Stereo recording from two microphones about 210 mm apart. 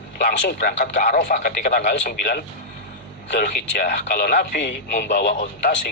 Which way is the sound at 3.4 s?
40° left (ahead or behind).